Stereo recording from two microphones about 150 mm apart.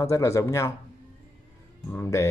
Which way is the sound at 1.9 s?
20° left (ahead or behind).